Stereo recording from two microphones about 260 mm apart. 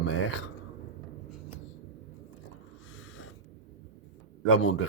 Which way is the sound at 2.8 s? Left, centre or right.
Left.